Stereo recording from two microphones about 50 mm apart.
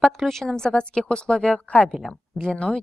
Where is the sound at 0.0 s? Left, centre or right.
Centre.